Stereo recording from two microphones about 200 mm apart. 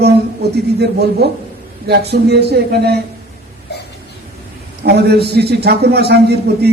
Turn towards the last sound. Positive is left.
turn(degrees=-55)  # may be behind; listen again after turning